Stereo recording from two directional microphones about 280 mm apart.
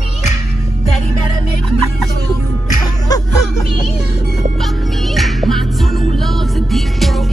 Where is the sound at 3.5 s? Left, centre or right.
Centre.